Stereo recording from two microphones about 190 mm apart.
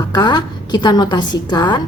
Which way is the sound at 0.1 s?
20° left (ahead or behind).